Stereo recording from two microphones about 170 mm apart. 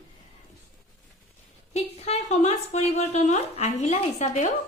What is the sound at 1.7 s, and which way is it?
A woman's voice, 40° left (ahead or behind).